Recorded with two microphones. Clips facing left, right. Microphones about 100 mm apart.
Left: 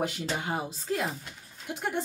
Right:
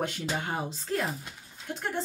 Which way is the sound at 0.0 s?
5° left (ahead or behind).